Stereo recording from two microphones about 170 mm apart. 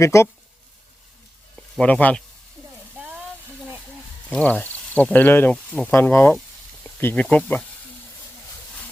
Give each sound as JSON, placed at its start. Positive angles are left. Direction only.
{"t": 0.0, "sound": "speech", "side_deg": 15}
{"t": 1.5, "sound": "speech", "side_deg": 5}
{"t": 4.3, "sound": "speech", "side_deg": 10}